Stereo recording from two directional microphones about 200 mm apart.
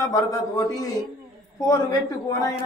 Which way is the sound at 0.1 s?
15° left (ahead or behind).